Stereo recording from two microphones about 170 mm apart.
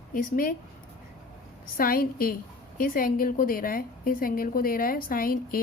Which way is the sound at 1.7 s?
60° left (ahead or behind).